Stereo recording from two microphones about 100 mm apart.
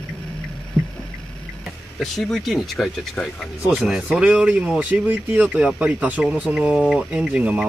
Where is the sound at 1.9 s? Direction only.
Centre (ahead or behind).